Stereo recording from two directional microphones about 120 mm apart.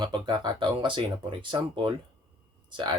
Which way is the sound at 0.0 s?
40° right (ahead or behind).